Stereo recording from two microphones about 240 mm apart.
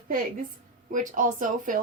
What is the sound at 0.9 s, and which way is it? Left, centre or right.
Speech, right.